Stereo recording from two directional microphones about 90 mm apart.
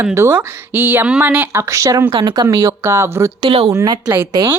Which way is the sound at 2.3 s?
50° right (ahead or behind).